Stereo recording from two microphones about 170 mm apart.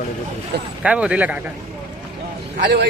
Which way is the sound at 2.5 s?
65° right (ahead or behind).